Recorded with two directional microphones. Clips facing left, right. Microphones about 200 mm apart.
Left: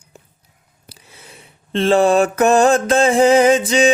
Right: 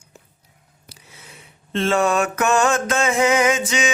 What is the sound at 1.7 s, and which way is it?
Mantra, 30° left (ahead or behind).